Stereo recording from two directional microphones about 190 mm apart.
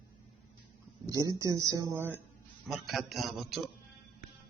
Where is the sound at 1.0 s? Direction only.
15° right (ahead or behind).